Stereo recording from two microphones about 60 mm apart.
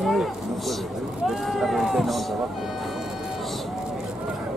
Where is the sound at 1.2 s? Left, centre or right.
Centre.